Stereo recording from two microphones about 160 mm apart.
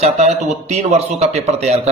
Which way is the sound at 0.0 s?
45° right (ahead or behind).